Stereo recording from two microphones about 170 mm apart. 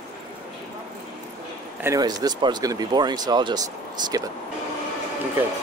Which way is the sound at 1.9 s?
25° right (ahead or behind).